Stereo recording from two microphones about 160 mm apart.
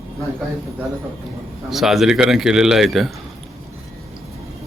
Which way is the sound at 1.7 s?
Centre (ahead or behind).